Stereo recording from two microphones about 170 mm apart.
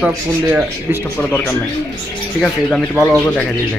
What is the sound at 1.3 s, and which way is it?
Speech, 10° left (ahead or behind).